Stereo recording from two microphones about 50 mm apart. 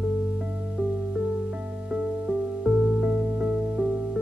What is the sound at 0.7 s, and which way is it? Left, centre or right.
Music, centre.